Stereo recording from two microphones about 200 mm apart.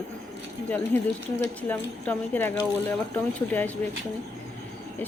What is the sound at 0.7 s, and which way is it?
Speech, 10° left (ahead or behind).